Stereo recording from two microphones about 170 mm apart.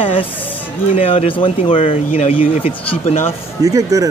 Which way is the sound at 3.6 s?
20° right (ahead or behind).